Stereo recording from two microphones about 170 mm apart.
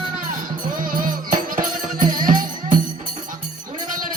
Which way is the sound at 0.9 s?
50° right (ahead or behind).